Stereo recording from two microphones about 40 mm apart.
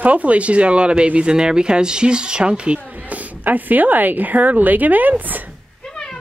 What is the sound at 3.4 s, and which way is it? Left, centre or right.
A woman's voice, right.